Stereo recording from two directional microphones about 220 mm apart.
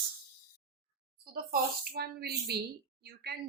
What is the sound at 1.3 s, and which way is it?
Speech, 40° right (ahead or behind).